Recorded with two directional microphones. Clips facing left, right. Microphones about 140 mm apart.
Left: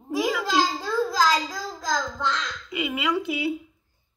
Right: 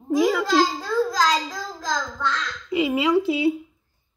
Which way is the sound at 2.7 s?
35° right (ahead or behind).